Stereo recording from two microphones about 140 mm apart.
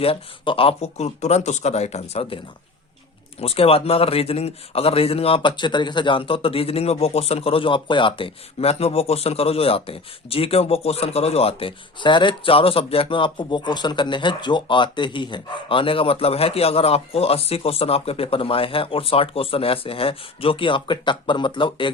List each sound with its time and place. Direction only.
0.0 s speech: 40° left (ahead or behind)
3.4 s speech: 45° left (ahead or behind)